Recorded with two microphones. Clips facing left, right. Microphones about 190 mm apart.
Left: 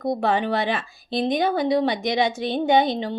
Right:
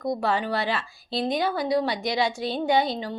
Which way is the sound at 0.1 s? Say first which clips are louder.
Left 4 dB; 20° left (ahead or behind).